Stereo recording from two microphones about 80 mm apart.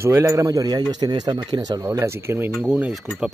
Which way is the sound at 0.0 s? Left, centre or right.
Right.